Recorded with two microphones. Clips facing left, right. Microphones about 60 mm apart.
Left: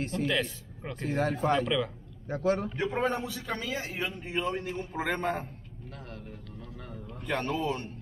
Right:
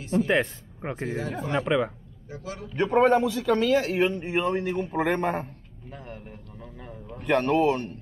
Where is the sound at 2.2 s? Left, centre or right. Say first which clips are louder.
Left 9 dB; left.